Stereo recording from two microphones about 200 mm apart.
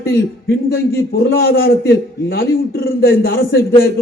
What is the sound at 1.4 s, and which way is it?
A man's voice, 50° left (ahead or behind).